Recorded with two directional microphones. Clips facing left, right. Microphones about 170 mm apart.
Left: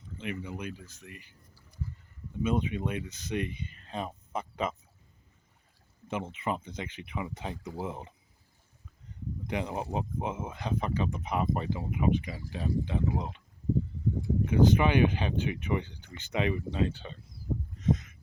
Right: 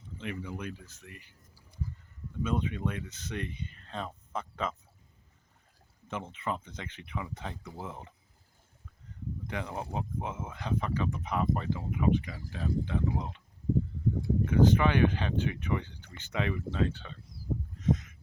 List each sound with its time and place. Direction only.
0.2 s speech: 15° left (ahead or behind)
2.4 s speech: 10° left (ahead or behind)
6.1 s speech: 10° left (ahead or behind)
9.5 s speech: 20° left (ahead or behind)
14.4 s speech: 15° left (ahead or behind)